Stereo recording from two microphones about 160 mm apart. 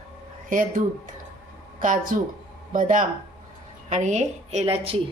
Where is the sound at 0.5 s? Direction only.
55° right (ahead or behind).